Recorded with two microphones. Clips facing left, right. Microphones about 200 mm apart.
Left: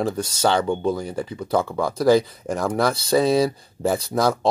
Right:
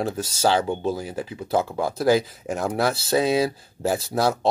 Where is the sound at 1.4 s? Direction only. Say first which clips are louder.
Left 1 dB; 25° right (ahead or behind).